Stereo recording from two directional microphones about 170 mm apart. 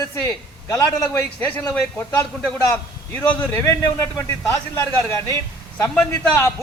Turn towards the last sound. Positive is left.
turn(degrees=10)  # may be behind; listen again after turning